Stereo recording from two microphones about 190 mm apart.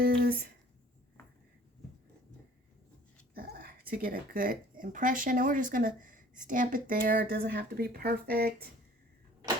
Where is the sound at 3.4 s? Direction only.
50° right (ahead or behind).